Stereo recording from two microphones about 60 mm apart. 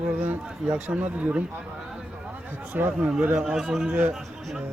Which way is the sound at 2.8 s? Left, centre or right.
Right.